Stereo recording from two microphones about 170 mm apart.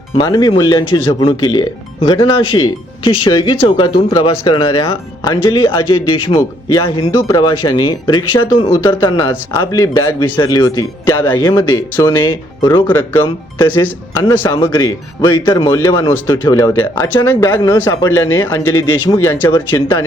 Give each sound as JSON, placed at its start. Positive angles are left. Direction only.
{"t": 0.2, "sound": "speech", "side_deg": 25}
{"t": 7.1, "sound": "speech", "side_deg": 15}
{"t": 12.9, "sound": "speech", "side_deg": 15}